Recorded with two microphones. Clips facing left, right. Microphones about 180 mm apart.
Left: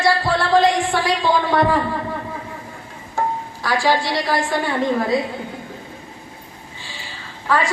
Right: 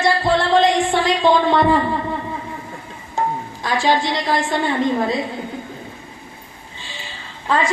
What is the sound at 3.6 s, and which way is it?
Speech, 20° right (ahead or behind).